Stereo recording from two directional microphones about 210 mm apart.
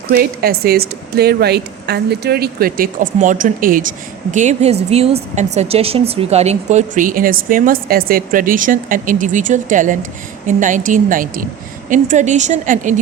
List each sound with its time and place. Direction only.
0.1 s a woman's voice: 45° right (ahead or behind)